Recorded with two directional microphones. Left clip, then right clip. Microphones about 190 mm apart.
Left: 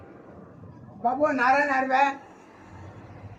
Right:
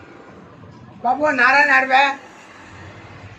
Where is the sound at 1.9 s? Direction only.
40° left (ahead or behind).